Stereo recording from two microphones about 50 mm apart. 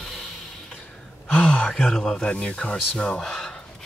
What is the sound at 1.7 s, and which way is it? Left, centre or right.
Speech, centre.